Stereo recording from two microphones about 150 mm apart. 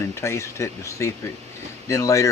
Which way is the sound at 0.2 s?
20° left (ahead or behind).